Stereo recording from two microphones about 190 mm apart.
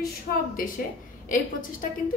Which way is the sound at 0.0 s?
50° left (ahead or behind).